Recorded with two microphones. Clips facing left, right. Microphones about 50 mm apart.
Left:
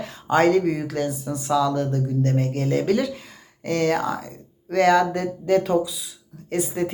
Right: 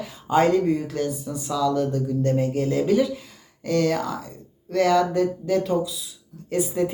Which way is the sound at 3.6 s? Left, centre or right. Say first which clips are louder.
Left 1 dB; left.